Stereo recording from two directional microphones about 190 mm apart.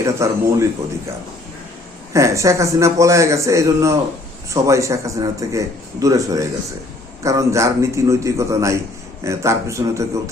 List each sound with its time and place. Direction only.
0.0 s a man's voice: 15° right (ahead or behind)
2.1 s a man's voice: 15° right (ahead or behind)